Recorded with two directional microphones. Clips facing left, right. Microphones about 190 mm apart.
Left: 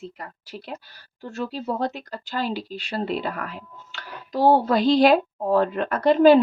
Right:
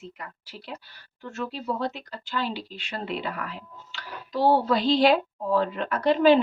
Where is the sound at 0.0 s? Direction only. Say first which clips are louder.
Left 4 dB; 40° left (ahead or behind).